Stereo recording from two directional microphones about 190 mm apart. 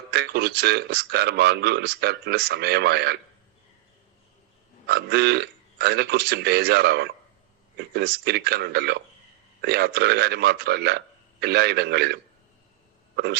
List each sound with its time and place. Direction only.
0.1 s speech: 60° right (ahead or behind)
4.9 s speech: 60° right (ahead or behind)